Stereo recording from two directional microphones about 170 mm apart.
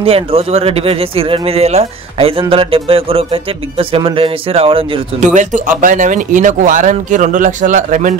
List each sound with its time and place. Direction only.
0.0 s speech: 35° right (ahead or behind)
5.2 s speech: 45° right (ahead or behind)